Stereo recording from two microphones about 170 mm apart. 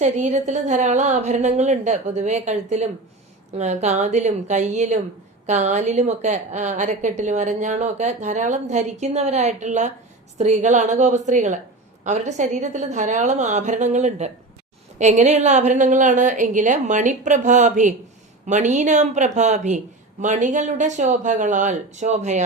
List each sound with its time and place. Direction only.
0.0 s a woman's voice: 45° right (ahead or behind)